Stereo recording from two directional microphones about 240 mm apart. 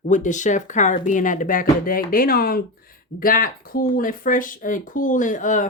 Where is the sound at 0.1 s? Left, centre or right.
Left.